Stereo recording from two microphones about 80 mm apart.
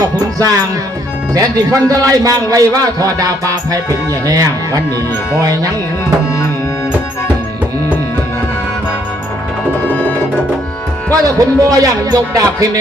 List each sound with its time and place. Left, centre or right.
0.0 s music: right
1.3 s a man's voice: right
11.1 s a man's voice: right